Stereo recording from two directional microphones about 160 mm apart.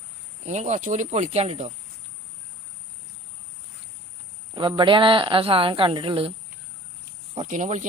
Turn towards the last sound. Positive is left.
turn(degrees=-50)  # may be behind; listen again after turning